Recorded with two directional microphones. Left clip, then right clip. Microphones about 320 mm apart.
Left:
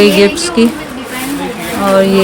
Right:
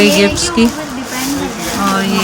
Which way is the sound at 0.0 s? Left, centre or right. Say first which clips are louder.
Left 2 dB; centre.